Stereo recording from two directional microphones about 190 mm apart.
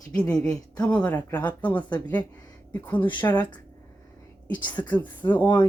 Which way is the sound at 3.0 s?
25° left (ahead or behind).